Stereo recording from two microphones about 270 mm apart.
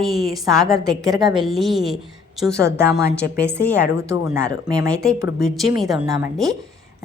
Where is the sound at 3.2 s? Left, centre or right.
Left.